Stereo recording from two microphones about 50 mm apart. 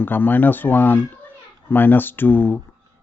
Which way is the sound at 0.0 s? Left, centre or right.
Left.